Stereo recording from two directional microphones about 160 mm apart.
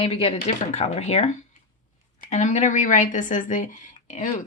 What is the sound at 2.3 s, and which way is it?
A woman's voice, 50° left (ahead or behind).